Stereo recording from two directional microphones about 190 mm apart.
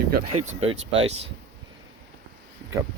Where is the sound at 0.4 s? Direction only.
30° right (ahead or behind).